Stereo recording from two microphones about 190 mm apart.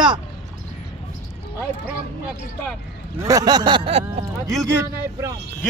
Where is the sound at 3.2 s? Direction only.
20° right (ahead or behind).